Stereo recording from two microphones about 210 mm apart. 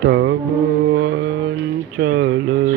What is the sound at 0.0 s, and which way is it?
Mantra, 65° right (ahead or behind).